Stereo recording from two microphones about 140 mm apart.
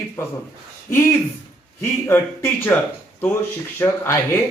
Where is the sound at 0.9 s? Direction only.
20° left (ahead or behind).